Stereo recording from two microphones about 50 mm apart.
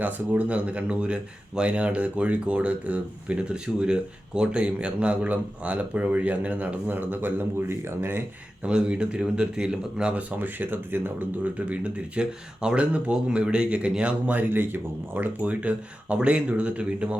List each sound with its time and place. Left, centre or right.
0.0 s speech: right
8.6 s speech: centre
10.2 s speech: right
11.7 s speech: right
14.3 s speech: right